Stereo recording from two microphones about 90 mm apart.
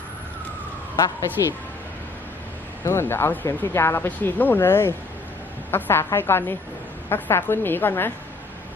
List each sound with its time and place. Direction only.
1.4 s speech: 40° left (ahead or behind)
2.8 s speech: 30° left (ahead or behind)